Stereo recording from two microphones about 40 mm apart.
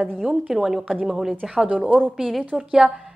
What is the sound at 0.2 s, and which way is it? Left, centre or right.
A woman's voice, centre.